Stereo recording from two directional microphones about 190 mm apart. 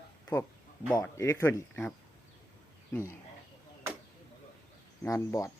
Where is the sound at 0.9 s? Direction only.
15° left (ahead or behind).